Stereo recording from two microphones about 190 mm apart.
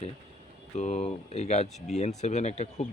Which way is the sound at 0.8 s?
40° left (ahead or behind).